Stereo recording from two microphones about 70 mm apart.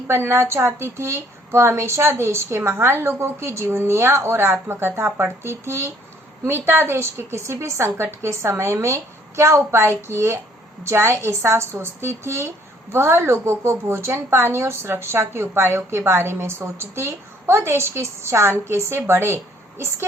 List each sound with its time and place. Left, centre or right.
0.1 s a woman's voice: right